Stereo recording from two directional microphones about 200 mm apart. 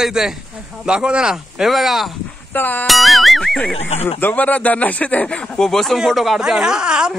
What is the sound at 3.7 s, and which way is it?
Speech, 30° left (ahead or behind).